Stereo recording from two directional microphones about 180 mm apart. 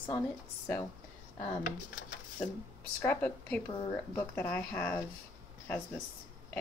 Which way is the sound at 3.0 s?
10° left (ahead or behind).